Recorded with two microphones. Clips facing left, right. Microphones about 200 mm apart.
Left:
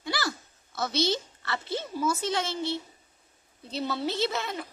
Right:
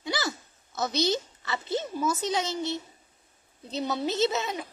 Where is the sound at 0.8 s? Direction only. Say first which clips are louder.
Right 1 dB; 15° right (ahead or behind).